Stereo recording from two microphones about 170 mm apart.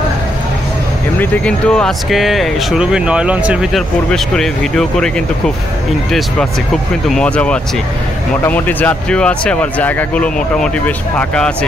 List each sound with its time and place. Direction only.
1.2 s speech: 5° left (ahead or behind)
4.1 s speech: 5° left (ahead or behind)
7.1 s speech: 5° left (ahead or behind)